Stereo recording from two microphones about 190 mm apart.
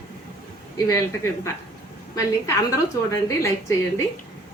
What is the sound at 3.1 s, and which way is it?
Speech, 15° left (ahead or behind).